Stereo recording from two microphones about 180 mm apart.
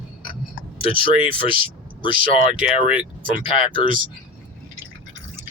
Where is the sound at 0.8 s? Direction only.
30° left (ahead or behind).